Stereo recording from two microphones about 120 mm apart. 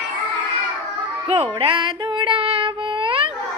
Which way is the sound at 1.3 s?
50° right (ahead or behind).